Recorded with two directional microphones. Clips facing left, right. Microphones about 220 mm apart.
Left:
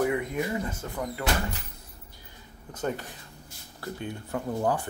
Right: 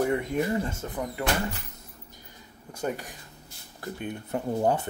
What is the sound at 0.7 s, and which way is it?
Speech, 20° right (ahead or behind).